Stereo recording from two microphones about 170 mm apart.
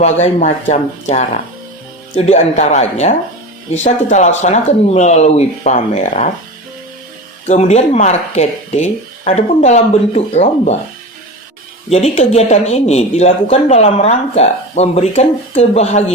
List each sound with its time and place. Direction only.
0.0 s speech: 40° left (ahead or behind)
7.4 s speech: 40° left (ahead or behind)
11.9 s speech: 40° left (ahead or behind)